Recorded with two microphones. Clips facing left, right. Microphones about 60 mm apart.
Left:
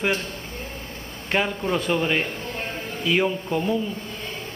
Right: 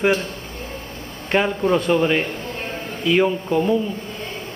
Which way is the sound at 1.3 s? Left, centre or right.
Centre.